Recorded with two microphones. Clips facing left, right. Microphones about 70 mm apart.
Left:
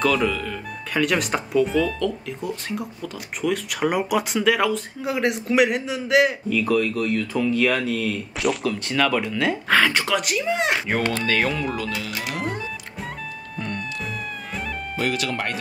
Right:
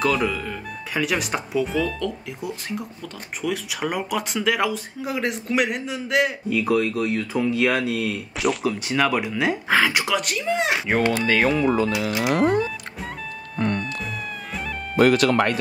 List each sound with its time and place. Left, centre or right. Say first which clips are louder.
0.0 s speech: left 1 dB; centre
6.5 s speech: even; centre
8.4 s speech: right 1 dB; centre
8.7 s speech: even; centre
12.2 s speech: right 11 dB; right
13.6 s music: right 7 dB; right
15.0 s speech: right 9 dB; right